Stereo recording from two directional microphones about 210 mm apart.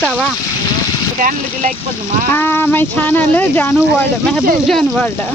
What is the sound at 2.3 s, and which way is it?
Speech, 10° left (ahead or behind).